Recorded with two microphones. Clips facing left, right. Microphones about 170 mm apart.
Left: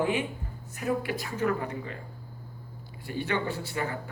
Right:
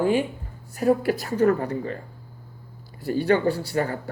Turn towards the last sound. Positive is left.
turn(degrees=-40)  # may be behind; listen again after turning